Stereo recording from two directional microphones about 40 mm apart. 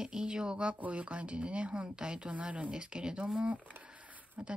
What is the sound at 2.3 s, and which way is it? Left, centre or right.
Speech, right.